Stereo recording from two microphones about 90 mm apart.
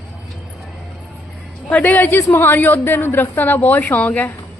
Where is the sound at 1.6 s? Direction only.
15° left (ahead or behind).